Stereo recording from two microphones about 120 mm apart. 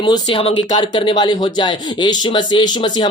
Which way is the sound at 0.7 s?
40° left (ahead or behind).